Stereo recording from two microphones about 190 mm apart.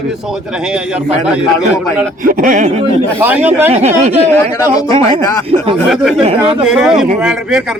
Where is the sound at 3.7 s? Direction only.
35° right (ahead or behind).